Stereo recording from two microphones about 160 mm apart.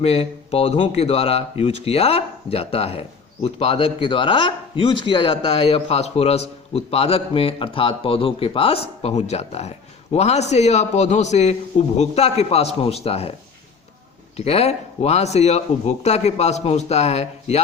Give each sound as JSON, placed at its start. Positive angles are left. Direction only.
{"t": 0.0, "sound": "a man's voice", "side_deg": 40}
{"t": 14.3, "sound": "speech", "side_deg": 40}